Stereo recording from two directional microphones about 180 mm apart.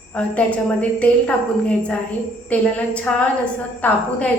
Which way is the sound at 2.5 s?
5° left (ahead or behind).